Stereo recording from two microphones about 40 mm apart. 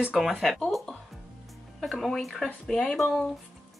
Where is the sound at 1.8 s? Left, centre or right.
Centre.